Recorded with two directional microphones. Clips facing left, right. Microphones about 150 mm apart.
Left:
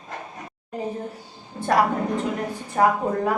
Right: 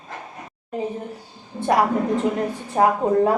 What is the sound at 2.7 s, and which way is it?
Speech, 25° right (ahead or behind).